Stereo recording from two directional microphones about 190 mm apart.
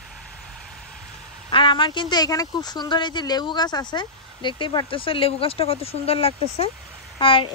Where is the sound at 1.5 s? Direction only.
25° left (ahead or behind).